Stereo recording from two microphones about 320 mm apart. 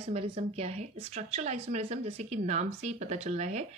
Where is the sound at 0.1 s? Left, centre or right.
Centre.